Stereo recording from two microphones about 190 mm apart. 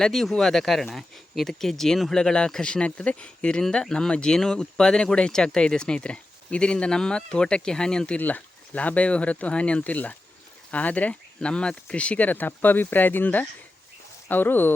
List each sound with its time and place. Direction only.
0.0 s speech: centre (ahead or behind)